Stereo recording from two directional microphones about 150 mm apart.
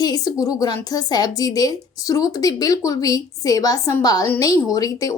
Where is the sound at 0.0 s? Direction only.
25° left (ahead or behind).